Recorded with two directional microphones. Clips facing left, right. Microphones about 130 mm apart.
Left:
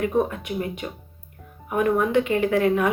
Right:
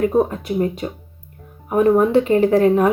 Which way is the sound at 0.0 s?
35° right (ahead or behind).